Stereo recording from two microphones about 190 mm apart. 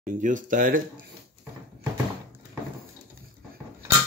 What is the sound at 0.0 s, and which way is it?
Speech, 45° right (ahead or behind).